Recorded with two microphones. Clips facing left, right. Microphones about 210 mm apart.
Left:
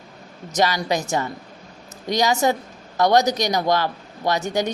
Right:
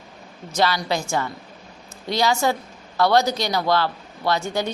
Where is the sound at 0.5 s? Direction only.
15° left (ahead or behind).